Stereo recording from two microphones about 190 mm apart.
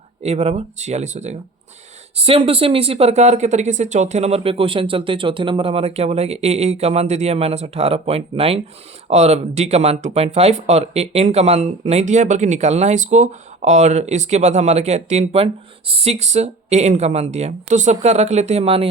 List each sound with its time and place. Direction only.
0.2 s speech: 35° right (ahead or behind)